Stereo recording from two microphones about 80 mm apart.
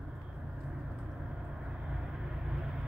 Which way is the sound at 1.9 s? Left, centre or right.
Centre.